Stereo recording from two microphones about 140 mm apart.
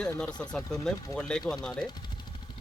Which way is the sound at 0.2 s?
5° left (ahead or behind).